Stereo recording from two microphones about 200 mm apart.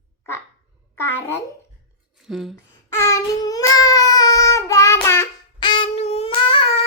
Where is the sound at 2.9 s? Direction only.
15° left (ahead or behind).